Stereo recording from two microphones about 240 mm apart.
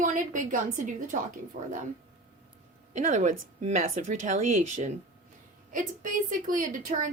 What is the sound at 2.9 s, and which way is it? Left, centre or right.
A woman's voice, right.